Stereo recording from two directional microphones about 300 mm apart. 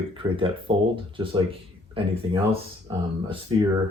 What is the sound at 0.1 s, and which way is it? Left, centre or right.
Speech, centre.